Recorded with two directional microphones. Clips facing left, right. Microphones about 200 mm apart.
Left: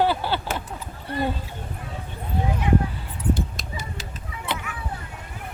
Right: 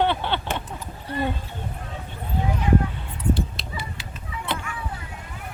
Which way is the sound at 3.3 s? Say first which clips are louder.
Right 1 dB; 45° left (ahead or behind).